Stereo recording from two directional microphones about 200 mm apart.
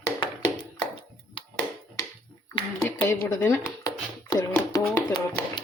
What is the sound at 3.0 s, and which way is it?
Speech, 10° left (ahead or behind).